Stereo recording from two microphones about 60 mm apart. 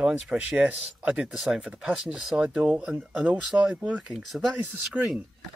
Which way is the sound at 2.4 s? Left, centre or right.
Right.